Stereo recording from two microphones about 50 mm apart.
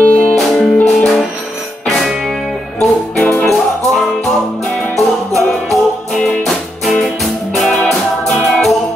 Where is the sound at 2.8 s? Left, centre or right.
Centre.